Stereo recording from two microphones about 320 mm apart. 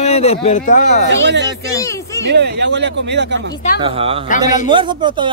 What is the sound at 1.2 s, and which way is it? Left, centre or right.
Speech, right.